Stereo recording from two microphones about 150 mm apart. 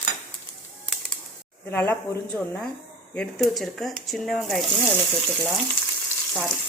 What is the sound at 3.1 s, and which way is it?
Speech, centre (ahead or behind).